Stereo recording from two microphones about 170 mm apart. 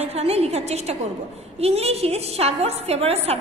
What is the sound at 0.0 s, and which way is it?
A woman's voice, 35° right (ahead or behind).